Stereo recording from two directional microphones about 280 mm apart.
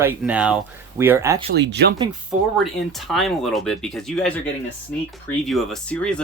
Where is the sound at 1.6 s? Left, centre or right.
Right.